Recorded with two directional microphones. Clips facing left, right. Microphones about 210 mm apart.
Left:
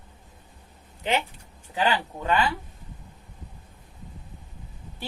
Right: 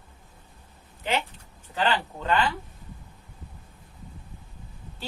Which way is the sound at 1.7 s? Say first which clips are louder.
Left 1 dB; 10° left (ahead or behind).